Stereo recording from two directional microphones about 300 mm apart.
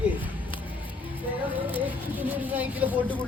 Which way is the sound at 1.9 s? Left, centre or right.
Centre.